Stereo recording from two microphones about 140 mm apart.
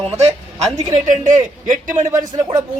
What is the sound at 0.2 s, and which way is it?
Speech, 50° right (ahead or behind).